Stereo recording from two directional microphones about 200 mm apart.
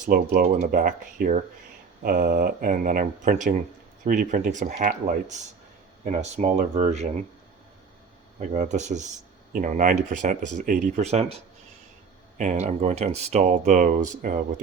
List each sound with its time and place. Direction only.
0.0 s speech: 45° right (ahead or behind)
6.1 s speech: 35° right (ahead or behind)
8.4 s speech: 35° right (ahead or behind)
12.4 s speech: 35° right (ahead or behind)